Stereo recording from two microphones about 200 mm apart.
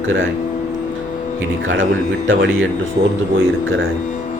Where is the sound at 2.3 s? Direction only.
70° right (ahead or behind).